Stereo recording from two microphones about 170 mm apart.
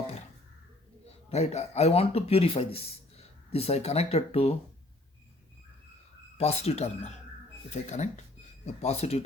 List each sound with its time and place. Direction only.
1.3 s speech: 40° left (ahead or behind)
6.3 s speech: 40° left (ahead or behind)